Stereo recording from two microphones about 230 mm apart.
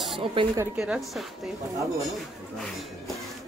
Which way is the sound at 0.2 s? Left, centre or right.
Right.